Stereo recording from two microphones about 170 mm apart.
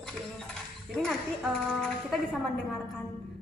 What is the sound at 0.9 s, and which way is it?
A woman's voice, centre (ahead or behind).